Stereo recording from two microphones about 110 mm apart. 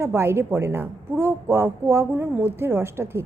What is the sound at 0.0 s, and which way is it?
A woman's voice, 25° right (ahead or behind).